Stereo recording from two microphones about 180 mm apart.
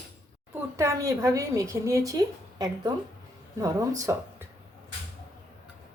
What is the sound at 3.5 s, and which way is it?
Speech, 20° right (ahead or behind).